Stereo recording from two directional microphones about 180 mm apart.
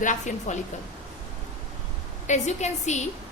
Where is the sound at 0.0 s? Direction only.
45° left (ahead or behind).